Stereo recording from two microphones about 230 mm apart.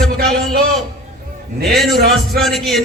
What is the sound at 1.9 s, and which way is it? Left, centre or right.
Speech, right.